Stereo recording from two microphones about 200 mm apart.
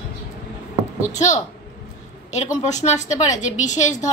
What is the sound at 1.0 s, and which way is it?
Speech, 35° left (ahead or behind).